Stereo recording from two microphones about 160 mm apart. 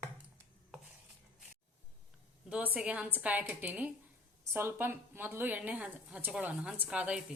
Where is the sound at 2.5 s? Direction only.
10° right (ahead or behind).